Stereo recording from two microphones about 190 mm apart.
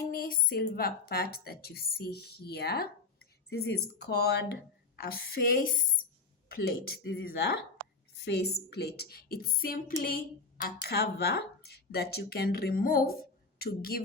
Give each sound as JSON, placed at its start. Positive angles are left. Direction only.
{"t": 0.1, "sound": "a woman's voice", "side_deg": 50}